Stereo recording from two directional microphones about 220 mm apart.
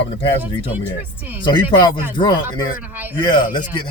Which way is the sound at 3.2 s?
20° left (ahead or behind).